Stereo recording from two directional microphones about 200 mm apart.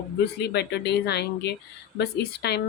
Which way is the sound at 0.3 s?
55° left (ahead or behind).